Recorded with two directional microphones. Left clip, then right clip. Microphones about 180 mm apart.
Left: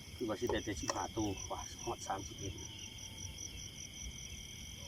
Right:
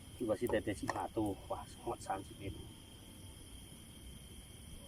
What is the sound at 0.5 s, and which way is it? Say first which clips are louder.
Speech: right 3 dB; 35° right (ahead or behind).